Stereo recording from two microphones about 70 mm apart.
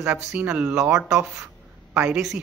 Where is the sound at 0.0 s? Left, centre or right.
Centre.